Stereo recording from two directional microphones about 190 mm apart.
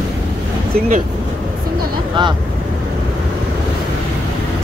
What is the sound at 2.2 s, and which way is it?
Speech, 25° right (ahead or behind).